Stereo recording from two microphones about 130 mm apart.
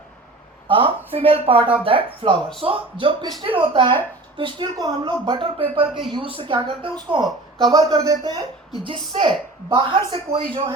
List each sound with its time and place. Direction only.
0.7 s a woman's voice: 45° right (ahead or behind)
8.8 s a woman's voice: 40° right (ahead or behind)